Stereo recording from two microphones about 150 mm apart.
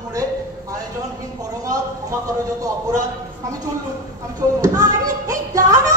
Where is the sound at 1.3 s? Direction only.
25° right (ahead or behind).